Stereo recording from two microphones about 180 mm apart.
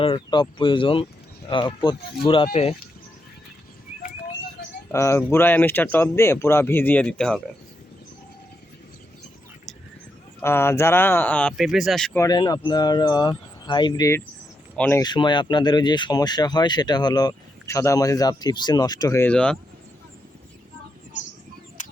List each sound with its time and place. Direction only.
0.0 s speech: 30° left (ahead or behind)
4.9 s speech: 15° left (ahead or behind)
10.4 s speech: 15° left (ahead or behind)
12.2 s speech: 20° left (ahead or behind)
15.0 s speech: 25° left (ahead or behind); by 19.5 s 5° left (ahead or behind)
21.8 s bird: 45° left (ahead or behind)